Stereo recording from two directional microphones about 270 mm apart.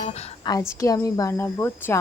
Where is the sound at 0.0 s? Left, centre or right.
Left.